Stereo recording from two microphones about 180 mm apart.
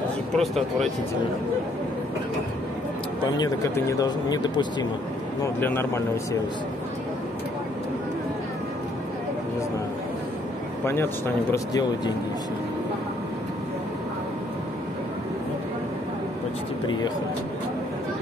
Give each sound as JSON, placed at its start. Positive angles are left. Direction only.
{"t": 0.4, "sound": "speech", "side_deg": 0}
{"t": 3.3, "sound": "speech", "side_deg": 20}
{"t": 10.9, "sound": "speech", "side_deg": 15}